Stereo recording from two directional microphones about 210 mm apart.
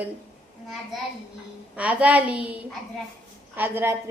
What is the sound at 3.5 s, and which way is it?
Speech, 10° right (ahead or behind).